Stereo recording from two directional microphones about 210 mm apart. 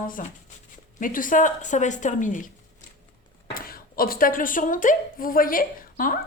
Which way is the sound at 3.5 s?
45° left (ahead or behind).